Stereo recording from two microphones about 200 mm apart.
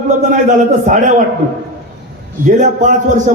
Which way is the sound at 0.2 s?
40° right (ahead or behind).